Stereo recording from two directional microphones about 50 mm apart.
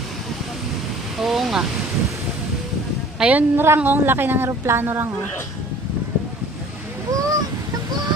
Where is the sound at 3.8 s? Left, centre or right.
Right.